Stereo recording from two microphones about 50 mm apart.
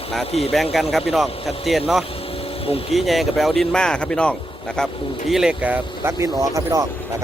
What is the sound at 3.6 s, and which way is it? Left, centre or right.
Speech, centre.